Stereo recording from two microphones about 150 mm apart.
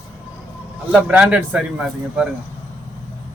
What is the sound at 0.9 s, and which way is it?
Speech, 10° right (ahead or behind).